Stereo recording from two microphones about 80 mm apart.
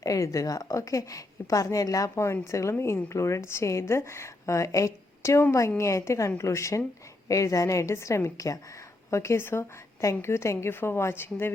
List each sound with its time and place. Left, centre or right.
0.0 s a woman's voice: left